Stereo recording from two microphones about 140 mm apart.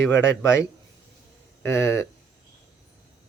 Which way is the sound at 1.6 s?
20° left (ahead or behind).